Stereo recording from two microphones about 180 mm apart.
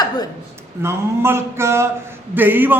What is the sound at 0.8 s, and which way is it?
A man's voice, 15° right (ahead or behind).